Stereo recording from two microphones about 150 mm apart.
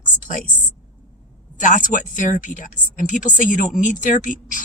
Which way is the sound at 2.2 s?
60° left (ahead or behind).